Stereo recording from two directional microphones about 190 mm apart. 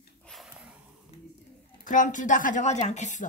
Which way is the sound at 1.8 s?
45° left (ahead or behind).